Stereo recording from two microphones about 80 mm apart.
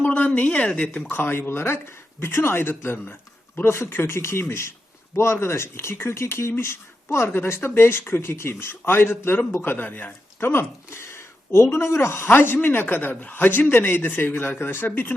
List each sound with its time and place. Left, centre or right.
0.0 s speech: centre